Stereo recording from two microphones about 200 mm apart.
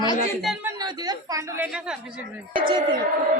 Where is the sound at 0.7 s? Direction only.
20° right (ahead or behind); by 2.2 s 5° right (ahead or behind).